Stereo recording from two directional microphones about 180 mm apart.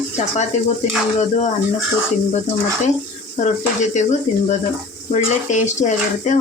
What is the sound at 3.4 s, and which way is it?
Speech, 40° left (ahead or behind).